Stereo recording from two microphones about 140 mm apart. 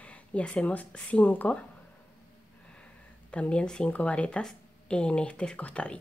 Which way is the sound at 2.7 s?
10° left (ahead or behind).